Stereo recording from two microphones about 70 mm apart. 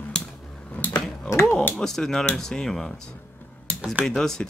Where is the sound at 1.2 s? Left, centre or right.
Left.